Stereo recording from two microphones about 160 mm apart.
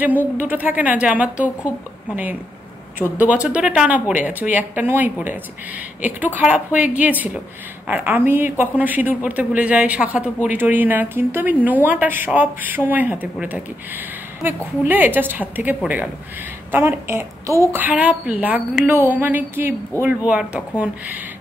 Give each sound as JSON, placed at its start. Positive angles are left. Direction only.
{"t": 0.4, "sound": "speech", "side_deg": -10}
{"t": 3.0, "sound": "speech", "side_deg": -10}